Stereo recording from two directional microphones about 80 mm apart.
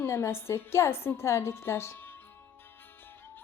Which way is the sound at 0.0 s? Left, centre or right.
Left.